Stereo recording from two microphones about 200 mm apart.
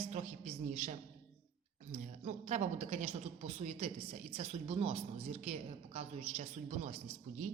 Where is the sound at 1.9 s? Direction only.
35° right (ahead or behind).